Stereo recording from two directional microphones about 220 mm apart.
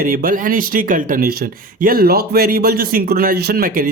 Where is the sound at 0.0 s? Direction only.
40° right (ahead or behind).